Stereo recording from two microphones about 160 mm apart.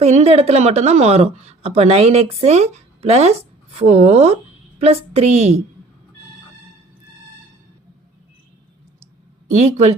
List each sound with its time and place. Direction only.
0.0 s a woman's voice: 45° right (ahead or behind)
9.6 s a woman's voice: 40° right (ahead or behind)